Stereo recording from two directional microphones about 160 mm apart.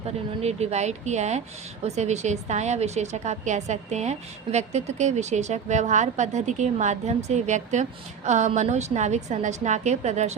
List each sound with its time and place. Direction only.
0.4 s a woman's voice: 40° right (ahead or behind)